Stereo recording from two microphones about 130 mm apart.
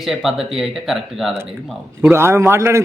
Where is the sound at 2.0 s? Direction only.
20° right (ahead or behind).